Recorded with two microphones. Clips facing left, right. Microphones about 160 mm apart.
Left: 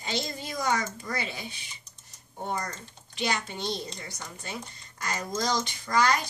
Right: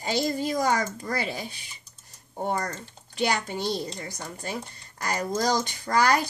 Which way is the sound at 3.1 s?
45° right (ahead or behind).